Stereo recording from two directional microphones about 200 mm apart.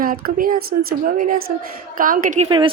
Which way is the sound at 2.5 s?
25° right (ahead or behind).